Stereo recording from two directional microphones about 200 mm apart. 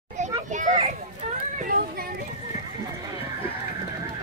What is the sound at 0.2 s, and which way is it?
Children playing, 40° right (ahead or behind).